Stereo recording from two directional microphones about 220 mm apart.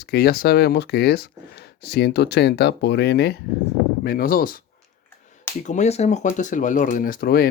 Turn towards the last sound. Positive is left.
turn(degrees=40)  # may be behind; listen again after turning